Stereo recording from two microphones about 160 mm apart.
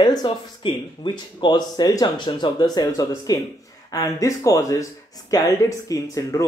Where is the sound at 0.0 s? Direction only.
25° left (ahead or behind).